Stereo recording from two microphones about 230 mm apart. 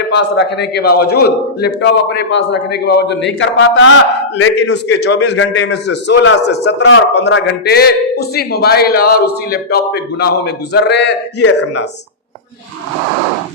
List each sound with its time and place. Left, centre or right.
0.1 s a man's voice: left